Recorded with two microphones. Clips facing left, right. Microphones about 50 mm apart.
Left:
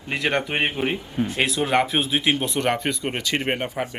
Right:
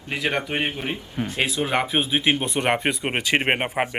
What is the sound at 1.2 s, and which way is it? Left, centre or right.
Speech, right.